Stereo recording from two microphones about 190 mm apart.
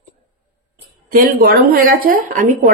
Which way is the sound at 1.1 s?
50° right (ahead or behind).